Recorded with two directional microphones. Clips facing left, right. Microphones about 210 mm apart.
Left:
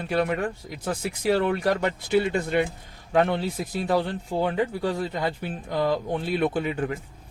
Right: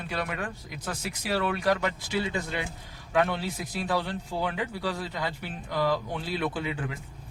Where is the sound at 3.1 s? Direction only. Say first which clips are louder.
Left 4 dB; 45° left (ahead or behind).